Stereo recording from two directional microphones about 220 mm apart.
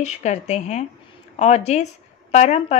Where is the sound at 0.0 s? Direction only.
30° left (ahead or behind).